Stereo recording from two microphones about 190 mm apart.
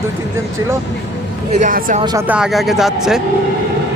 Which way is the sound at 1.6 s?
45° right (ahead or behind).